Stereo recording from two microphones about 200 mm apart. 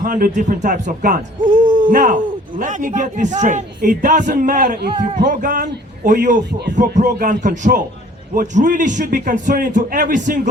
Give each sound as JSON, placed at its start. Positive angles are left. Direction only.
{"t": 0.0, "sound": "speech", "side_deg": -40}
{"t": 4.9, "sound": "speech", "side_deg": -35}